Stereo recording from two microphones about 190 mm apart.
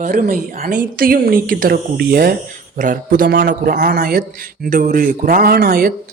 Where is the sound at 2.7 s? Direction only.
45° right (ahead or behind).